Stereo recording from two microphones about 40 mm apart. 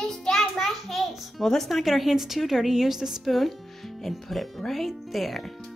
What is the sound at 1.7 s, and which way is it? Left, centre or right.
A woman's voice, centre.